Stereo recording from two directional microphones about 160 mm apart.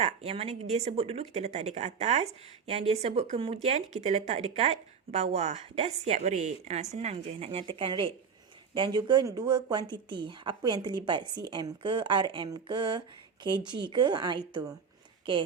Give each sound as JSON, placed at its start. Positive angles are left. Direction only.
{"t": 0.0, "sound": "speech", "side_deg": -40}